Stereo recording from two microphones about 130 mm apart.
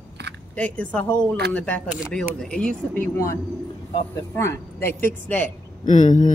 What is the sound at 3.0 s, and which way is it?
Speech, 20° left (ahead or behind).